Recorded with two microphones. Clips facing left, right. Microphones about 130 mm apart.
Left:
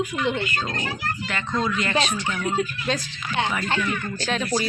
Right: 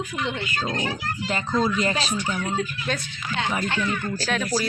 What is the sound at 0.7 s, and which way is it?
Speech, 20° right (ahead or behind).